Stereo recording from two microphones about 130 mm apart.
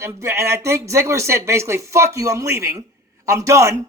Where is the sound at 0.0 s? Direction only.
20° right (ahead or behind).